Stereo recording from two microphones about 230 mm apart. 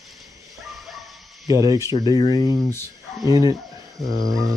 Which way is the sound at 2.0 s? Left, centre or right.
Centre.